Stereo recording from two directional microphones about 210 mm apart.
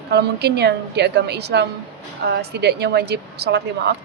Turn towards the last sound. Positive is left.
turn(degrees=-50)  # may be behind; listen again after turning